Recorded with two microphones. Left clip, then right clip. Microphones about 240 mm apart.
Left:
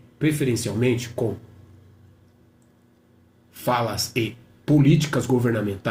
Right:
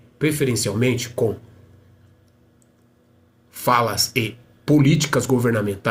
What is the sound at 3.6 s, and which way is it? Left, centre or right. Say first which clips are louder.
Speech: right 5 dB; right.